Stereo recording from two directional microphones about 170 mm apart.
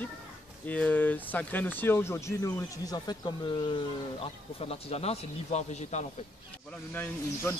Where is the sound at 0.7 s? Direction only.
10° left (ahead or behind); by 6.0 s 40° left (ahead or behind).